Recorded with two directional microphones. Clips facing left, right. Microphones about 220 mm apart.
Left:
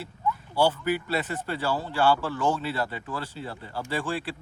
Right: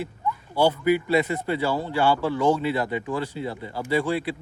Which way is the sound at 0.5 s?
15° right (ahead or behind).